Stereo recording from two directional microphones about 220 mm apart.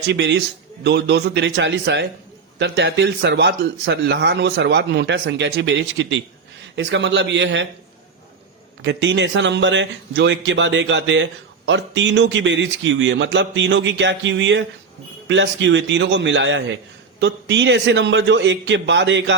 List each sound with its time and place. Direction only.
0.1 s speech: 50° right (ahead or behind)
8.8 s speech: 55° right (ahead or behind)